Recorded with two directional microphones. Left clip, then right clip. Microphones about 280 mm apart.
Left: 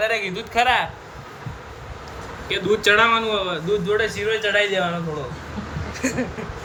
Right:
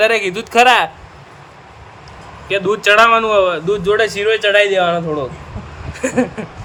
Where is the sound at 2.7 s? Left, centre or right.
Centre.